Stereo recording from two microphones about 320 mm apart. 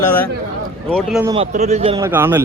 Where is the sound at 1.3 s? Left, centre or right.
Centre.